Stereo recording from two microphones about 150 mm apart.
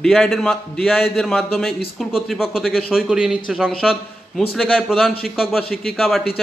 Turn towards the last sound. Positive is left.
turn(degrees=0)  # may be behind; listen again after turning